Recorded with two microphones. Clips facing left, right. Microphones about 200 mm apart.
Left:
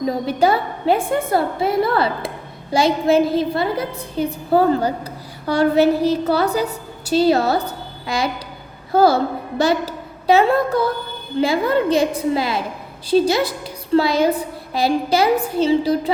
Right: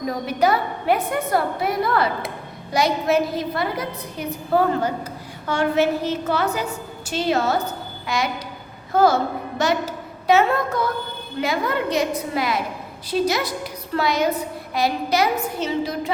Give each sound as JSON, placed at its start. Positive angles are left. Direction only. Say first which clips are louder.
{"t": 0.0, "sound": "a woman's voice", "louder": "left 3 dB", "side_deg": 30}